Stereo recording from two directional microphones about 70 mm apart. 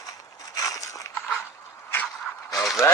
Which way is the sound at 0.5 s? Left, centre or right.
Left.